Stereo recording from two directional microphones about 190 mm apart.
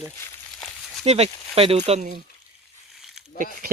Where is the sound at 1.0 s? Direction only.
35° right (ahead or behind).